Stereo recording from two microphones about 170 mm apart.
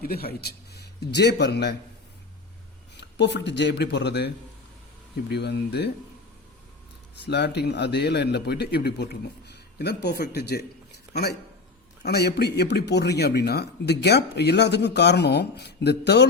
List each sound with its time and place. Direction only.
0.0 s a man's voice: 65° left (ahead or behind); by 1.7 s 85° left
3.0 s speech: 90° left
5.3 s speech: 75° left (ahead or behind)
7.2 s speech: 80° left